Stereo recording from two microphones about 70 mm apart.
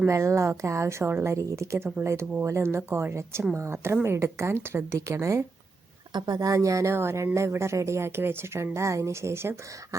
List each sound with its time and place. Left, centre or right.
0.1 s a woman's voice: right
6.1 s a woman's voice: right